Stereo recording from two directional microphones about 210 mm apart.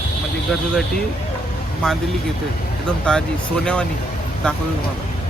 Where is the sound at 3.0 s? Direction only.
5° left (ahead or behind).